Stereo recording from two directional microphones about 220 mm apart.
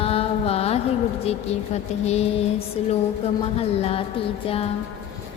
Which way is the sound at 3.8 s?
25° left (ahead or behind).